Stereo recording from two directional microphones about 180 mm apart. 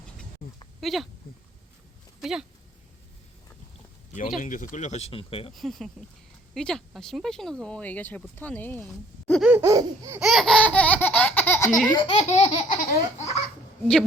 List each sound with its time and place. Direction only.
0.8 s speech: centre (ahead or behind)
2.2 s speech: 5° right (ahead or behind)
4.4 s speech: 45° left (ahead or behind); by 5.5 s 30° left (ahead or behind)
5.5 s speech: centre (ahead or behind)
9.4 s laughter: 10° right (ahead or behind)
10.2 s laughter: centre (ahead or behind); by 12.1 s 25° left (ahead or behind)
12.1 s speech: 35° left (ahead or behind)
12.6 s laughter: 45° left (ahead or behind)